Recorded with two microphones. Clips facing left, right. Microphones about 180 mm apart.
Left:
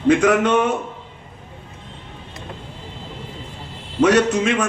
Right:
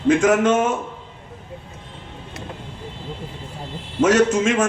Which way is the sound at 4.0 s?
65° left (ahead or behind).